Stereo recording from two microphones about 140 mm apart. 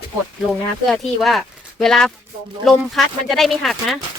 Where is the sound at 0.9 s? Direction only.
Centre (ahead or behind).